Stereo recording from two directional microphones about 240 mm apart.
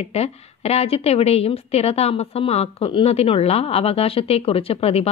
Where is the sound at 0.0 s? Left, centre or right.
Left.